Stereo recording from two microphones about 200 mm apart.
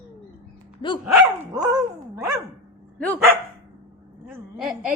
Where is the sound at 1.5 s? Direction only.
20° right (ahead or behind).